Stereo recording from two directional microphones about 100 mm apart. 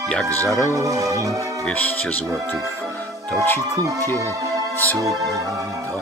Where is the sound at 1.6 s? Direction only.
15° left (ahead or behind).